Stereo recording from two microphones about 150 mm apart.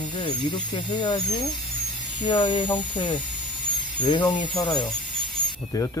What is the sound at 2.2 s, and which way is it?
Speech, 35° left (ahead or behind).